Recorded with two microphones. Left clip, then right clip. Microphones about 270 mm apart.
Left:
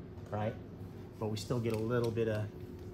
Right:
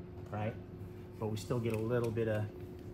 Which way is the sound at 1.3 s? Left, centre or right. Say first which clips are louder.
Left 1 dB; centre.